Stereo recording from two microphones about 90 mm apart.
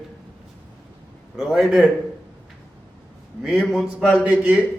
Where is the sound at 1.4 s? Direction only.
5° right (ahead or behind).